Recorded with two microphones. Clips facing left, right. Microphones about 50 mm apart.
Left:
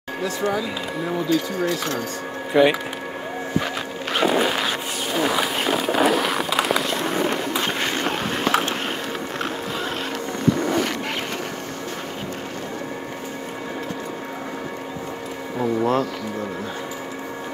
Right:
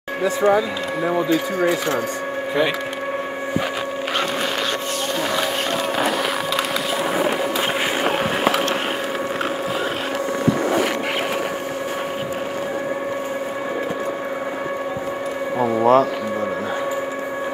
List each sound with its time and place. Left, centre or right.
0.2 s speech: centre
2.6 s speech: centre
4.2 s music: centre
5.1 s run: centre
10.5 s vehicle: centre
15.6 s a sound: centre